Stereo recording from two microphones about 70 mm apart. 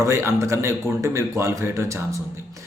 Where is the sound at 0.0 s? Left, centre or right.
Right.